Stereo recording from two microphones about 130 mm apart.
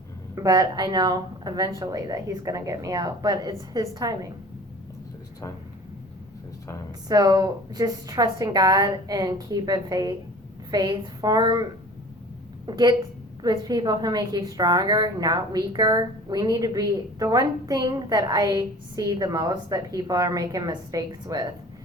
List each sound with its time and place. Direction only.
0.3 s a woman's voice: 30° right (ahead or behind)
7.1 s a woman's voice: 30° right (ahead or behind)
12.6 s a woman's voice: 35° right (ahead or behind)